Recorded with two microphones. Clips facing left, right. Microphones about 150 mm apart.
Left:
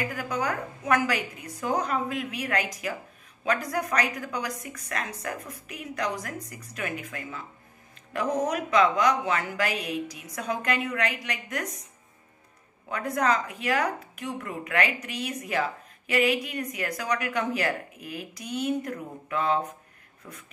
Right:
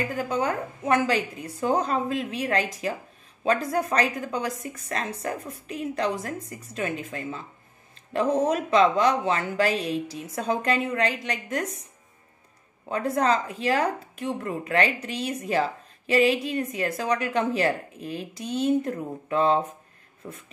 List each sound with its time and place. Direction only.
0.0 s speech: 25° right (ahead or behind)
12.8 s speech: 30° right (ahead or behind)